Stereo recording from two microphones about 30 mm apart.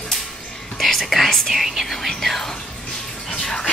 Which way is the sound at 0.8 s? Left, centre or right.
Centre.